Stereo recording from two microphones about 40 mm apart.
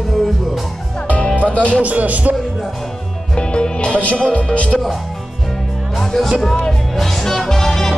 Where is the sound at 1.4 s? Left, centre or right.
Left.